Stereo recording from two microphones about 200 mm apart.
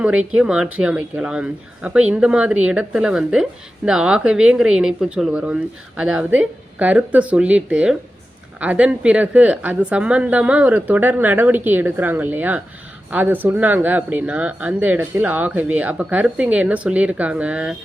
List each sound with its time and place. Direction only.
0.0 s speech: 5° right (ahead or behind)